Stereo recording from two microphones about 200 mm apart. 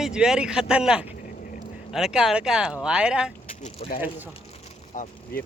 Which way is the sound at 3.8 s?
30° left (ahead or behind).